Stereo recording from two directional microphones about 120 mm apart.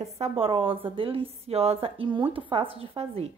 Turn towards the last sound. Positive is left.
turn(degrees=-55)  # may be behind; listen again after turning